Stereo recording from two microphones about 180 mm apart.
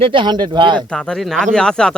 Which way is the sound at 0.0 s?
30° right (ahead or behind).